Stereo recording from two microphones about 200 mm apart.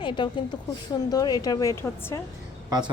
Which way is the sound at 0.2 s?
25° left (ahead or behind).